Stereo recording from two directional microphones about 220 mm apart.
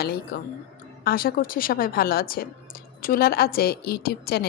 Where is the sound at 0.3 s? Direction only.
45° left (ahead or behind).